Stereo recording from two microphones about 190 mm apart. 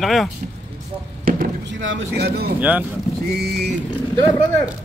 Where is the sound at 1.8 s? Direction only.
85° right.